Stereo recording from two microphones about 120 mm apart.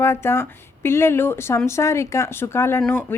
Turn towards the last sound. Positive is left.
turn(degrees=15)  # may be behind; listen again after turning